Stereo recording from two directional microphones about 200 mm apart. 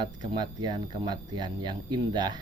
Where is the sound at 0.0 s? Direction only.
25° right (ahead or behind).